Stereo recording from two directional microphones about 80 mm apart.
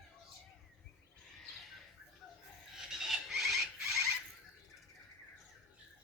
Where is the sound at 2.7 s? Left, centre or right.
Centre.